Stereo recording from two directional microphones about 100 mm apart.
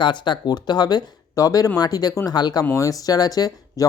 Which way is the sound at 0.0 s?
50° left (ahead or behind).